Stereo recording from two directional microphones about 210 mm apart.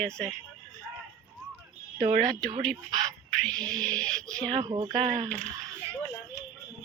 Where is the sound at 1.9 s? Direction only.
40° right (ahead or behind).